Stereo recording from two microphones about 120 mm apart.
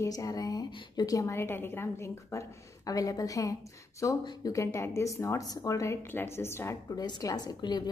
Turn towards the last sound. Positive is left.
turn(degrees=35)  # may be behind; listen again after turning